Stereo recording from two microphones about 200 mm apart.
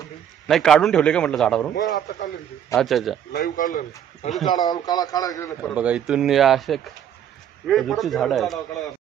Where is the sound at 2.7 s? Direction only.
Centre (ahead or behind).